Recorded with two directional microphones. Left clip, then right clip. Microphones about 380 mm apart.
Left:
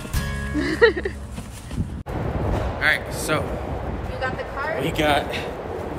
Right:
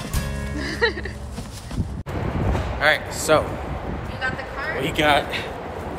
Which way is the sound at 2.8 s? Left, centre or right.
Centre.